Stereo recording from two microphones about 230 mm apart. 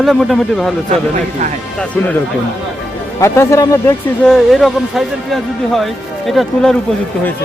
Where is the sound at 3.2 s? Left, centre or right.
Centre.